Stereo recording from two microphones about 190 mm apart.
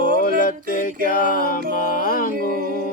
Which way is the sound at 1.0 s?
45° left (ahead or behind).